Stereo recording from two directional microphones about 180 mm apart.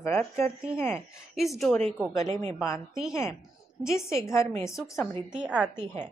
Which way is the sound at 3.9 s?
15° left (ahead or behind).